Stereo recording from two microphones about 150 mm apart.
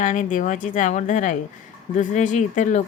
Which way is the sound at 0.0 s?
60° left (ahead or behind).